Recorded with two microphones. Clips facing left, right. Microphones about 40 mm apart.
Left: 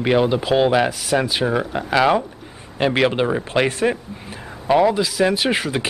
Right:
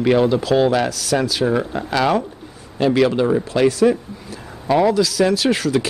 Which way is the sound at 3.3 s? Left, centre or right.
Left.